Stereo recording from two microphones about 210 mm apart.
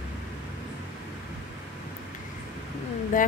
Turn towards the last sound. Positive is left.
turn(degrees=40)  # may be behind; listen again after turning